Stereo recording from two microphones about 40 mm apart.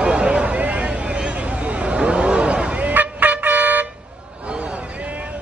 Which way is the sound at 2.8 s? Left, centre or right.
Right.